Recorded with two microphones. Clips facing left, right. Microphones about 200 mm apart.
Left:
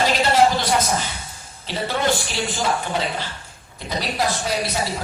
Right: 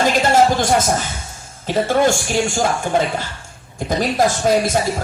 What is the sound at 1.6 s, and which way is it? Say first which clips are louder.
Speech: right 7 dB; 45° right (ahead or behind).